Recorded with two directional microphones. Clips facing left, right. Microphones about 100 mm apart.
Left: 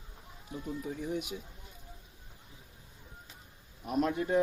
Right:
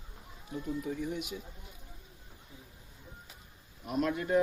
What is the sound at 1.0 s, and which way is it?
Speech, 45° left (ahead or behind).